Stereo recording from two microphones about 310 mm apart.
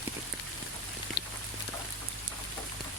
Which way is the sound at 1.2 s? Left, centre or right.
Left.